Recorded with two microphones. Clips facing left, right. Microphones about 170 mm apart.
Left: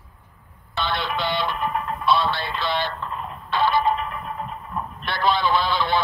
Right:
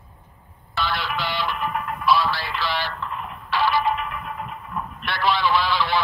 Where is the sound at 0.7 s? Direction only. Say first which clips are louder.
Left 1 dB; 25° left (ahead or behind).